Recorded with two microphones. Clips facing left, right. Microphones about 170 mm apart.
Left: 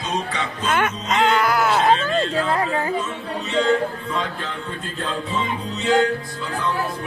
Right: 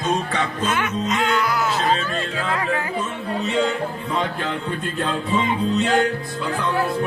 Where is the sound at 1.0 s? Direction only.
50° right (ahead or behind).